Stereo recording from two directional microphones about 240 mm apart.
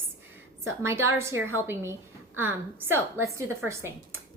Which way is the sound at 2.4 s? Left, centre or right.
Centre.